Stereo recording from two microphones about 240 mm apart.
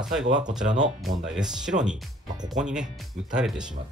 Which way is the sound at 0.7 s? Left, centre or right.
Right.